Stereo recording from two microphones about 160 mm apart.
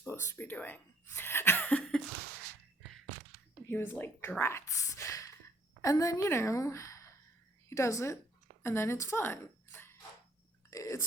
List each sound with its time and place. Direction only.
0.0 s speech: 15° left (ahead or behind)
3.7 s a woman's voice: 10° left (ahead or behind)